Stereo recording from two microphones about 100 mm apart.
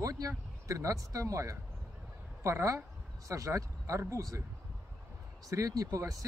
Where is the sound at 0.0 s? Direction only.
35° right (ahead or behind).